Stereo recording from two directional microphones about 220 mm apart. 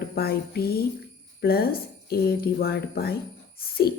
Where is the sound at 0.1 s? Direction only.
45° left (ahead or behind).